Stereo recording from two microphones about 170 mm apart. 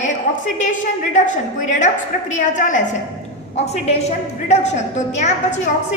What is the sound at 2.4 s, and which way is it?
A woman's voice, 45° left (ahead or behind).